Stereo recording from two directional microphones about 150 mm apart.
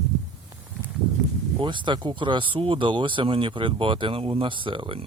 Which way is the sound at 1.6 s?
30° right (ahead or behind).